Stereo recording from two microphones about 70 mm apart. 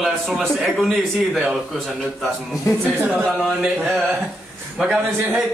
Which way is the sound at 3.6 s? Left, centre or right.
Centre.